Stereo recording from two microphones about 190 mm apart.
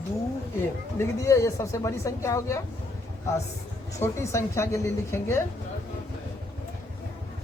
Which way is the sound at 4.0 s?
15° left (ahead or behind).